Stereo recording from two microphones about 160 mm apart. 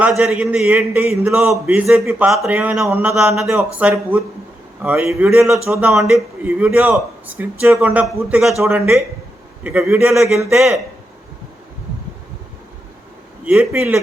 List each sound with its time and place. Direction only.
0.2 s a man's voice: 5° right (ahead or behind)
8.0 s speech: 5° right (ahead or behind)
9.6 s speech: 10° right (ahead or behind)
13.4 s a man's voice: 10° right (ahead or behind)